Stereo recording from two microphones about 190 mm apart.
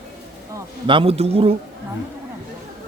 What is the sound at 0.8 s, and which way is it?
Speech, 30° right (ahead or behind).